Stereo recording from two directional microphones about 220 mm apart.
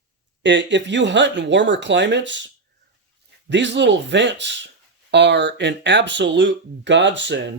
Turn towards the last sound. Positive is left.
turn(degrees=-55)  # may be behind; listen again after turning